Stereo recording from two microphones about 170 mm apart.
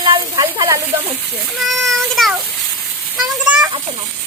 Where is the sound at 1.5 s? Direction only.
Centre (ahead or behind).